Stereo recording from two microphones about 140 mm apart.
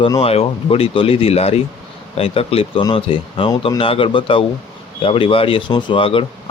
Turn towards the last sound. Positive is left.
turn(degrees=40)  # may be behind; listen again after turning